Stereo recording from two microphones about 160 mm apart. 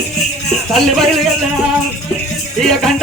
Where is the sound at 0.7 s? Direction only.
Centre (ahead or behind).